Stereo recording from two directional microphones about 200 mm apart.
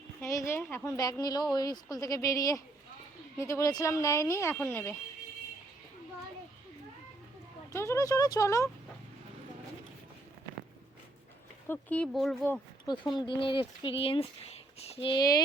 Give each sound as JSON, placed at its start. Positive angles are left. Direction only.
{"t": 0.2, "sound": "a woman's voice", "side_deg": 15}
{"t": 7.7, "sound": "a woman's voice", "side_deg": 15}
{"t": 11.7, "sound": "speech", "side_deg": 5}
{"t": 12.8, "sound": "speech", "side_deg": 20}